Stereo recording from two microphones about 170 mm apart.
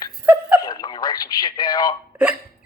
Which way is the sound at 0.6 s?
20° left (ahead or behind).